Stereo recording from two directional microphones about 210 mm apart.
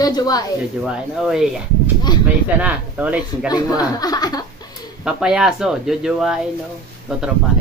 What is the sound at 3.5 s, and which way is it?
Speech, 20° left (ahead or behind).